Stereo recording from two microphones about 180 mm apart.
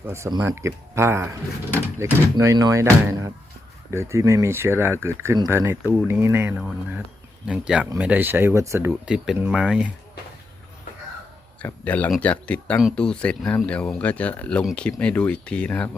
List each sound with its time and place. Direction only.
0.0 s speech: 15° right (ahead or behind)
8.9 s speech: 5° right (ahead or behind)
11.6 s speech: 10° left (ahead or behind)